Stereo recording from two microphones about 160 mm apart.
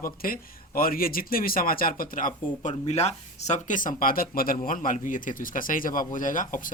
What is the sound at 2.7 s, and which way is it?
A man's voice, 40° left (ahead or behind).